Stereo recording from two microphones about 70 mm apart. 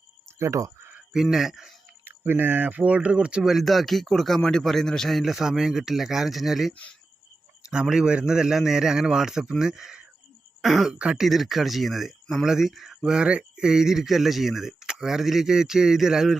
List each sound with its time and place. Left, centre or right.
0.3 s a sound: right
1.1 s speech: centre
2.0 s speech: right; by 3.5 s centre
3.5 s a man's voice: centre
11.3 s speech: centre